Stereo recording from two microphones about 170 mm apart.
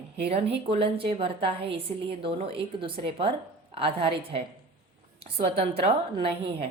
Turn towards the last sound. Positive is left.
turn(degrees=-35)  # may be behind; listen again after turning